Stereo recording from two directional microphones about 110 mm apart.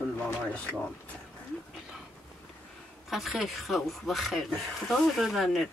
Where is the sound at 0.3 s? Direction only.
10° left (ahead or behind).